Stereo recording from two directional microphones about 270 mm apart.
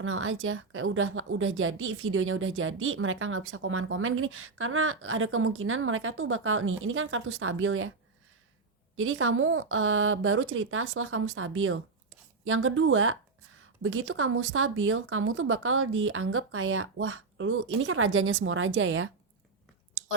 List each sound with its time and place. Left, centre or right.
0.0 s a woman's voice: right
9.0 s a woman's voice: right